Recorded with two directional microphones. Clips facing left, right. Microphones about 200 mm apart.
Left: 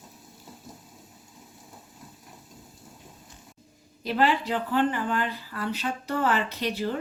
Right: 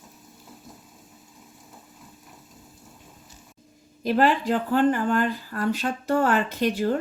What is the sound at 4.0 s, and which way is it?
Speech, 45° right (ahead or behind).